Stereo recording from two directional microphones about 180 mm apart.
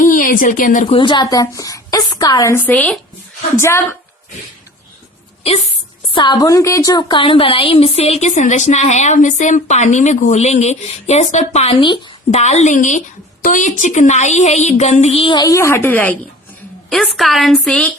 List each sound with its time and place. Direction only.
0.0 s speech: 45° left (ahead or behind)
0.9 s a woman's voice: 25° left (ahead or behind)
5.5 s a woman's voice: 35° left (ahead or behind); by 17.9 s 5° left (ahead or behind)